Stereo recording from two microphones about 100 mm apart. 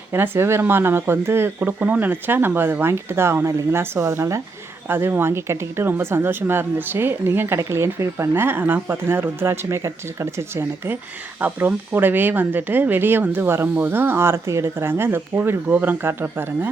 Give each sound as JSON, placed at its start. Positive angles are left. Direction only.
{"t": 0.1, "sound": "speech", "side_deg": -25}